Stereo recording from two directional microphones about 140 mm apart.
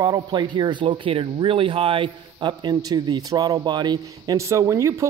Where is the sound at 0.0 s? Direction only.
30° right (ahead or behind).